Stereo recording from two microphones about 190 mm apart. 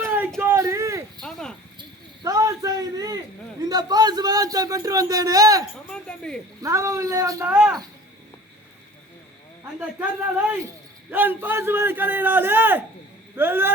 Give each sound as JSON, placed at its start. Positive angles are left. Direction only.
{"t": 0.0, "sound": "a sound", "side_deg": -10}
{"t": 1.2, "sound": "cricket", "side_deg": 0}
{"t": 1.8, "sound": "speech", "side_deg": -20}
{"t": 5.9, "sound": "a sound", "side_deg": 5}
{"t": 6.6, "sound": "a man's voice", "side_deg": -15}
{"t": 10.0, "sound": "a man's voice", "side_deg": -10}